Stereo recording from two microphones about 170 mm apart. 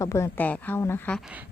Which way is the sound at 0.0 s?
15° left (ahead or behind).